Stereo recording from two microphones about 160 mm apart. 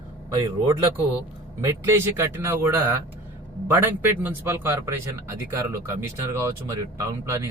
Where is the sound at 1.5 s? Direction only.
20° right (ahead or behind).